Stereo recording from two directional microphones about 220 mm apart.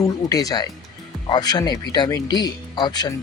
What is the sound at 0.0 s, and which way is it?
Speech, 15° left (ahead or behind).